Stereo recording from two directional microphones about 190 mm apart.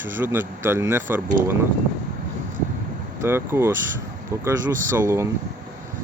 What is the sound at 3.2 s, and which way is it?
Speech, 15° right (ahead or behind).